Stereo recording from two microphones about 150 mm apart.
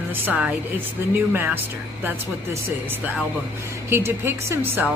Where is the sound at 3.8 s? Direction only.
15° right (ahead or behind).